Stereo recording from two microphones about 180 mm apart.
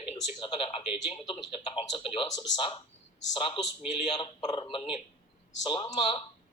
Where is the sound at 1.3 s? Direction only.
30° left (ahead or behind).